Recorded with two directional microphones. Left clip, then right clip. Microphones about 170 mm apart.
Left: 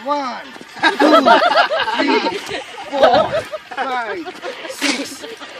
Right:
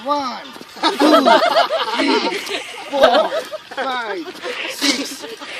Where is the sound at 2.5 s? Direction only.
50° right (ahead or behind).